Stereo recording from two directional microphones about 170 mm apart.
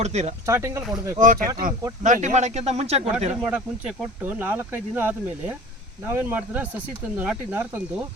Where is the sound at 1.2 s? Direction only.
50° right (ahead or behind).